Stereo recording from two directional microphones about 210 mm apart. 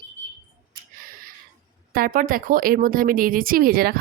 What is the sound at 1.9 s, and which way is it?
Speech, 40° right (ahead or behind).